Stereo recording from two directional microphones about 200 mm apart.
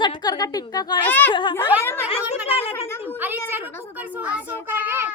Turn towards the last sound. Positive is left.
turn(degrees=-10)  # may be behind; listen again after turning